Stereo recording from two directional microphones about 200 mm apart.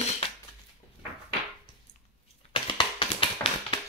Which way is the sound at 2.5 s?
25° left (ahead or behind).